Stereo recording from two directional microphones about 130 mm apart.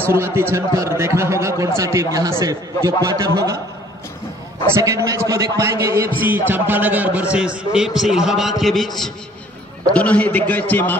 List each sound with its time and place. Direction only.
0.0 s a man's voice: 20° right (ahead or behind)
4.7 s a man's voice: 25° right (ahead or behind); by 11.0 s 15° left (ahead or behind)